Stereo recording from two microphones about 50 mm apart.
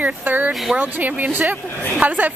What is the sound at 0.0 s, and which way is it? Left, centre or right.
Speech, right.